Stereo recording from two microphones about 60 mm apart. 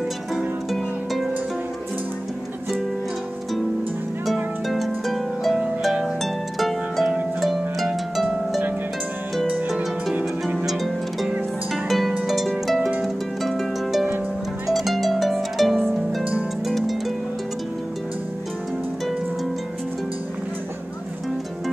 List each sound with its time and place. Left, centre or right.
0.7 s harp: centre
4.6 s harp: centre
10.6 s harp: centre